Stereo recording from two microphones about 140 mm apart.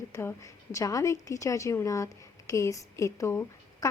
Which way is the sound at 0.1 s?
20° left (ahead or behind).